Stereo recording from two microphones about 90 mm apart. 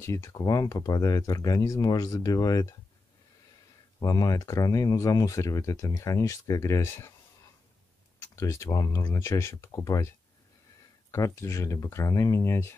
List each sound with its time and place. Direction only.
0.0 s speech: 30° left (ahead or behind)
4.0 s speech: 40° left (ahead or behind)
8.2 s a sound: 35° left (ahead or behind)
8.6 s speech: 40° left (ahead or behind)